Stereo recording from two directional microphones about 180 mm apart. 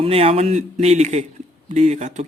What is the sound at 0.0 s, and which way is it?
Speech, 30° right (ahead or behind).